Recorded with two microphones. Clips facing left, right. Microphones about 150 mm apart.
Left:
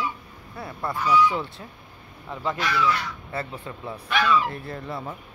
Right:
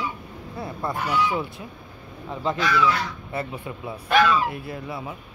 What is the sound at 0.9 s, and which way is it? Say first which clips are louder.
Speech: left 5 dB; 60° right (ahead or behind).